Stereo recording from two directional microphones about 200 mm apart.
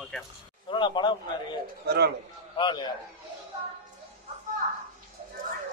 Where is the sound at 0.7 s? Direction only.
20° left (ahead or behind).